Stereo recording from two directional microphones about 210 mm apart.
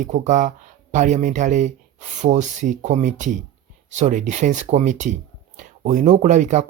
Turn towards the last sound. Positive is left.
turn(degrees=-35)  # may be behind; listen again after turning